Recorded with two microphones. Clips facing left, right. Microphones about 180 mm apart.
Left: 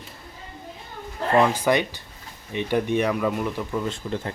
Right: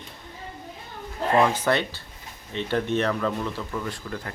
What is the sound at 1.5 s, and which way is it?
Speech, 10° left (ahead or behind).